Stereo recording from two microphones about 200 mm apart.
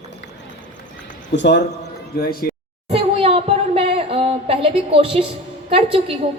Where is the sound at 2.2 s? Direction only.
50° left (ahead or behind).